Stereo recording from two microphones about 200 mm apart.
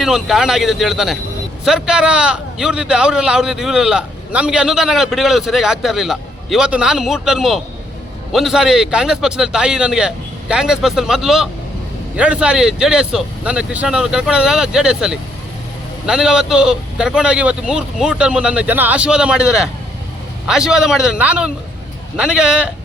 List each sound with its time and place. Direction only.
0.0 s a man's voice: centre (ahead or behind)